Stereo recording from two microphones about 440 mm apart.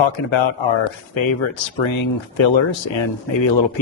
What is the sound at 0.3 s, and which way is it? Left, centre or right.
Speech, left.